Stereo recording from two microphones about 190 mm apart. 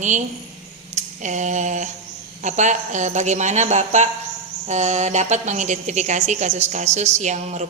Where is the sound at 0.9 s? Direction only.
40° right (ahead or behind).